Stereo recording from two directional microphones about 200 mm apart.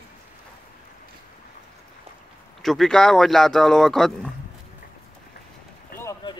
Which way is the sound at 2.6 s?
Centre (ahead or behind).